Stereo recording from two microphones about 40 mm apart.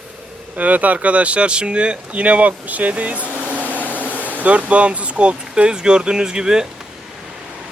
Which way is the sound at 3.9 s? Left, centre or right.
Right.